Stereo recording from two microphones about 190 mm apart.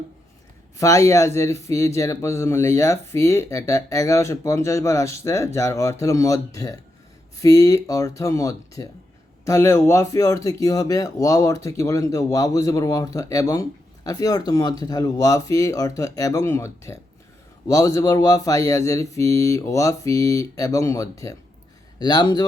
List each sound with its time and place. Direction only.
0.8 s speech: 15° left (ahead or behind)